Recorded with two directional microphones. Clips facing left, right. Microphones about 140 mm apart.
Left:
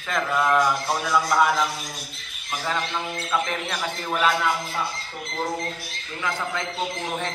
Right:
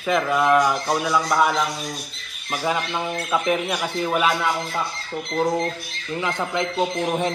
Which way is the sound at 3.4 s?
10° right (ahead or behind).